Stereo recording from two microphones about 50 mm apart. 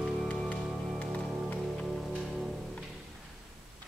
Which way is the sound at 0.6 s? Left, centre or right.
Centre.